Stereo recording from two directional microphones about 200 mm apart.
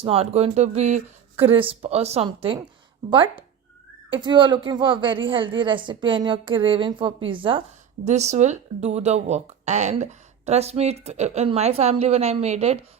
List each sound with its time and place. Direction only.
0.0 s a woman's voice: 30° right (ahead or behind)